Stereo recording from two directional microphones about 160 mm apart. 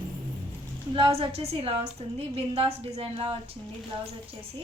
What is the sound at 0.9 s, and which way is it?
A woman's voice, 35° right (ahead or behind).